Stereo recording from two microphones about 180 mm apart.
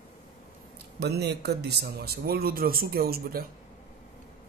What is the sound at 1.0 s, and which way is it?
Speech, 65° right (ahead or behind).